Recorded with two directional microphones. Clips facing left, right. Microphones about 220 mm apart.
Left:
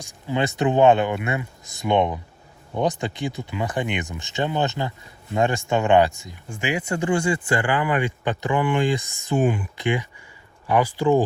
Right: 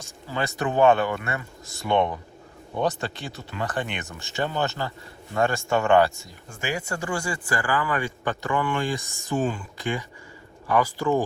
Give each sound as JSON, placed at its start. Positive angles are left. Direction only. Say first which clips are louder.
{"t": 0.0, "sound": "speech", "louder": "left 5 dB", "side_deg": 20}
{"t": 9.0, "sound": "speech", "louder": "left 4 dB", "side_deg": -45}
{"t": 9.2, "sound": "speech", "louder": "left 4 dB", "side_deg": 20}